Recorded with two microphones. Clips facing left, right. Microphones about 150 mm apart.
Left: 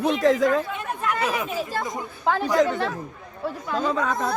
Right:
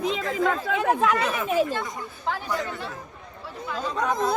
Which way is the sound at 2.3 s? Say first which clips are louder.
Left 9 dB; 85° left.